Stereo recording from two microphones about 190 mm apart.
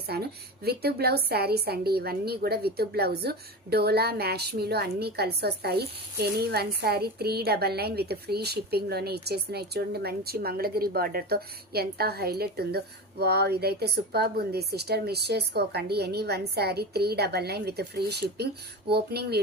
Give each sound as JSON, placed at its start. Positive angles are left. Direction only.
{"t": 0.1, "sound": "a woman's voice", "side_deg": -55}